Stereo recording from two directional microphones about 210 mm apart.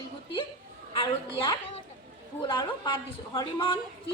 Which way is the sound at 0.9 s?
20° left (ahead or behind).